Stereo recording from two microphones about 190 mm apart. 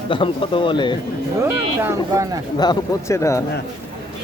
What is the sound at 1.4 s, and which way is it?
Speech, 15° right (ahead or behind).